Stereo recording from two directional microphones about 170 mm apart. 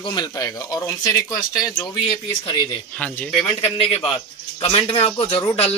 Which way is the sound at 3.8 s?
35° left (ahead or behind).